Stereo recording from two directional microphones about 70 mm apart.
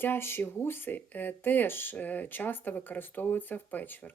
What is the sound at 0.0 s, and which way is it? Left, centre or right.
Speech, left.